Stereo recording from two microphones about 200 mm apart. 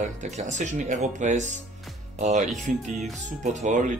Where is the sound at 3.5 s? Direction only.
40° right (ahead or behind).